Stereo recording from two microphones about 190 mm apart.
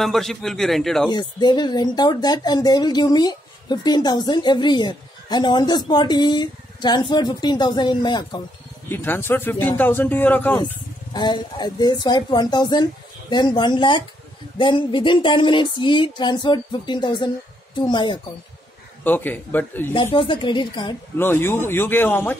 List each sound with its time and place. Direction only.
0.0 s speech: centre (ahead or behind)
1.1 s speech: 25° left (ahead or behind)
8.8 s speech: 10° left (ahead or behind)
11.1 s speech: 25° left (ahead or behind)
19.0 s speech: 10° left (ahead or behind)
20.2 s speech: 25° left (ahead or behind)
21.2 s speech: 10° left (ahead or behind)